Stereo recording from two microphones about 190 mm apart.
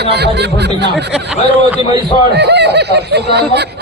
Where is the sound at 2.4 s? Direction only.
60° right (ahead or behind).